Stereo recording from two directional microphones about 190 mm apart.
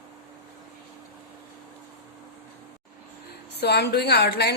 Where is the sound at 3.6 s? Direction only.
60° left (ahead or behind).